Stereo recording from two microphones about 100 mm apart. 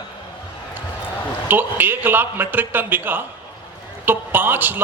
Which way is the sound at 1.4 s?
20° right (ahead or behind).